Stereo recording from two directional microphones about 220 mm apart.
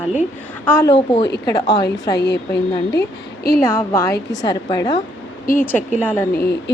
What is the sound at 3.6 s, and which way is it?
A woman's voice, 10° left (ahead or behind).